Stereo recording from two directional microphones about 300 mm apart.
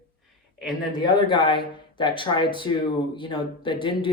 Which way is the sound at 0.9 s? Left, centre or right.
Centre.